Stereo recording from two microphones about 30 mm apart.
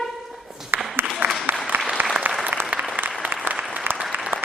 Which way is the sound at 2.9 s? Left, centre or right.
Right.